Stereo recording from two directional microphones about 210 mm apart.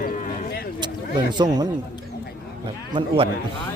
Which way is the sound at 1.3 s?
20° right (ahead or behind).